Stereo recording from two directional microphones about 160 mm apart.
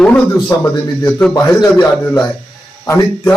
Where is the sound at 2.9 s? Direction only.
25° left (ahead or behind).